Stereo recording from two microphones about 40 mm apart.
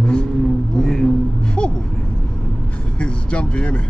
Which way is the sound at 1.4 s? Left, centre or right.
Left.